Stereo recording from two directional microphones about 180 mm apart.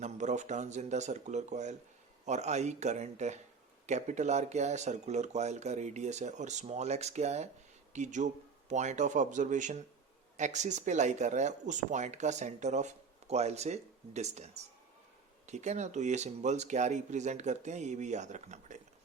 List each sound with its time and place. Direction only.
0.0 s speech: 40° right (ahead or behind)